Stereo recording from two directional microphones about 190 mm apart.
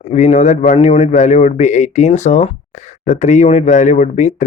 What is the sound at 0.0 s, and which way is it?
A man's voice, 35° left (ahead or behind).